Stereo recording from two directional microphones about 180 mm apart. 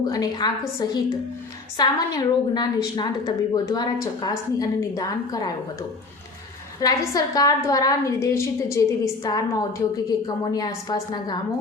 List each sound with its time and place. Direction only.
0.0 s a woman's voice: 20° left (ahead or behind)
1.8 s a woman's voice: 20° left (ahead or behind)
6.7 s a woman's voice: 20° left (ahead or behind)